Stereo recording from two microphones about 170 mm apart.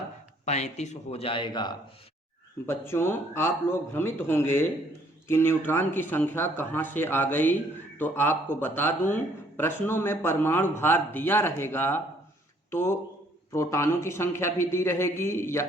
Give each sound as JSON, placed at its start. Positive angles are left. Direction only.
{"t": 0.4, "sound": "speech", "side_deg": 40}
{"t": 2.6, "sound": "speech", "side_deg": 15}